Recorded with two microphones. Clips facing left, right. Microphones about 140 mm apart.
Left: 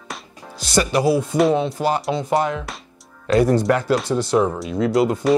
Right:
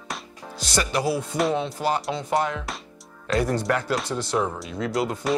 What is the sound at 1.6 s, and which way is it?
Speech, 10° left (ahead or behind).